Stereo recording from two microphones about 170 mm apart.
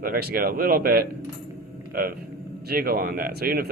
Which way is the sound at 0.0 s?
60° right (ahead or behind).